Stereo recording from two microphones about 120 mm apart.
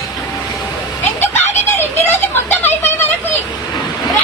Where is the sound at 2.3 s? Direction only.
15° left (ahead or behind).